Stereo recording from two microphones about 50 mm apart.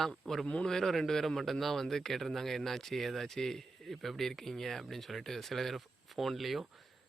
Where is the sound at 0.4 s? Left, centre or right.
Centre.